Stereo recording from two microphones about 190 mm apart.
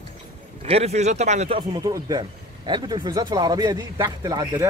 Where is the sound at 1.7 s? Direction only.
20° right (ahead or behind).